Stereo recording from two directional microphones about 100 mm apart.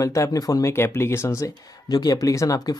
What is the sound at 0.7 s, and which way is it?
Speech, 25° left (ahead or behind).